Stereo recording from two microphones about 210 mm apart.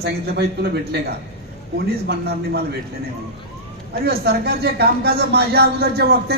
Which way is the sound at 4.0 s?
50° right (ahead or behind).